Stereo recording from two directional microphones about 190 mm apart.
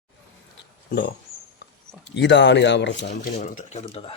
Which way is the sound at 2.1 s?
70° left (ahead or behind).